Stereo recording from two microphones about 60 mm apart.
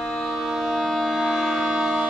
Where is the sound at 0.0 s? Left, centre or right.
Centre.